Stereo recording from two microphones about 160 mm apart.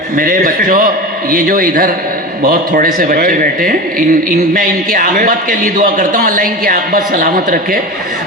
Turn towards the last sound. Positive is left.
turn(degrees=-65)  # may be behind; listen again after turning